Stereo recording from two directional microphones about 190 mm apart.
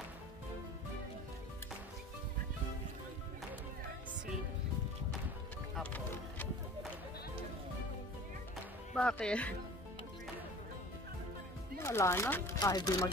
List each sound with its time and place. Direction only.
5.8 s run: 10° left (ahead or behind)
8.9 s speech: 5° left (ahead or behind)
11.8 s speech: 15° left (ahead or behind)